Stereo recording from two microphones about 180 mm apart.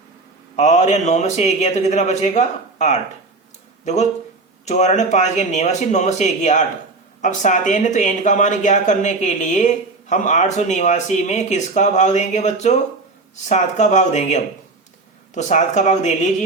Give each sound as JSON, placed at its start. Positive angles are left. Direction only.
{"t": 0.5, "sound": "a man's voice", "side_deg": 40}